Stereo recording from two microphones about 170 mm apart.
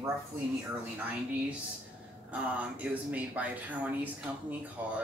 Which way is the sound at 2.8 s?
10° right (ahead or behind).